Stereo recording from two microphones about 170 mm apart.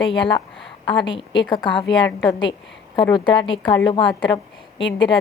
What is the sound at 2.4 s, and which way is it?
A woman's voice, 30° left (ahead or behind).